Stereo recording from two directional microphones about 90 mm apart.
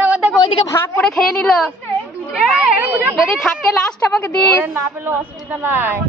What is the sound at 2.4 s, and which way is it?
Speech, 10° right (ahead or behind).